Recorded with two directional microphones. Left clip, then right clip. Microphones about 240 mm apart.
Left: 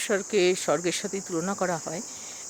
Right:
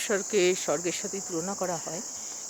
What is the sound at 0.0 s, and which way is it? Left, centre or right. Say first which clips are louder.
Speech: left 2 dB; centre.